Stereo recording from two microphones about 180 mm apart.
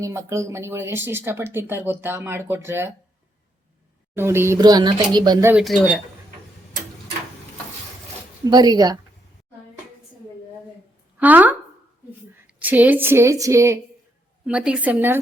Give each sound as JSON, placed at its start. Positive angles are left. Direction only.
{"t": 0.0, "sound": "speech", "side_deg": -15}
{"t": 4.1, "sound": "speech", "side_deg": -15}
{"t": 5.5, "sound": "speech", "side_deg": -5}
{"t": 8.4, "sound": "speech", "side_deg": -20}
{"t": 11.2, "sound": "speech", "side_deg": -10}
{"t": 12.5, "sound": "speech", "side_deg": -10}
{"t": 14.4, "sound": "speech", "side_deg": -5}